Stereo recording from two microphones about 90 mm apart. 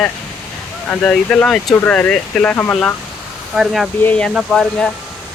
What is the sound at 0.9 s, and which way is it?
Speech, 10° left (ahead or behind).